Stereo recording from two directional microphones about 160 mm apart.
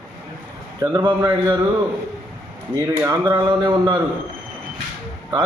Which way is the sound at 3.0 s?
25° right (ahead or behind).